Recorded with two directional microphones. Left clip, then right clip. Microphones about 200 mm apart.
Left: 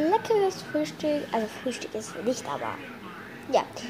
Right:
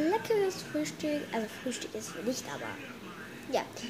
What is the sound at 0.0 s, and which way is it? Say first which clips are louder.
A woman's voice: left 5 dB; centre (ahead or behind).